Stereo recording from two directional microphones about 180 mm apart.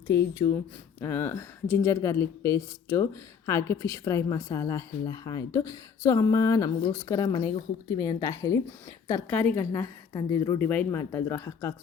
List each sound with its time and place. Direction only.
0.1 s a woman's voice: 15° left (ahead or behind)
10.6 s speech: 10° left (ahead or behind)